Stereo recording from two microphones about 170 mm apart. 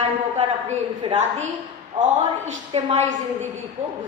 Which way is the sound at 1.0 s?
35° right (ahead or behind).